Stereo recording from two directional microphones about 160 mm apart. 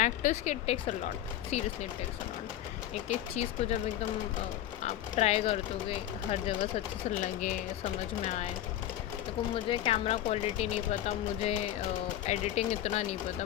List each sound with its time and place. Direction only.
0.0 s speech: 45° left (ahead or behind)
3.1 s speech: 45° left (ahead or behind)
4.8 s speech: 45° left (ahead or behind)
7.2 s speech: 55° left (ahead or behind)
9.6 s speech: 35° left (ahead or behind)